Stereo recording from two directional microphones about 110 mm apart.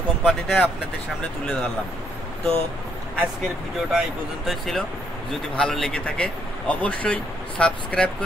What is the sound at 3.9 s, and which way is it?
A man's voice, centre (ahead or behind).